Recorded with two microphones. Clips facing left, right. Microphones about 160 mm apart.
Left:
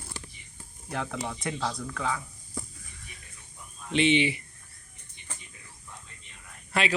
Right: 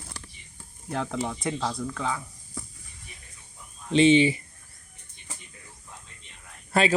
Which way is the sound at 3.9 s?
35° right (ahead or behind).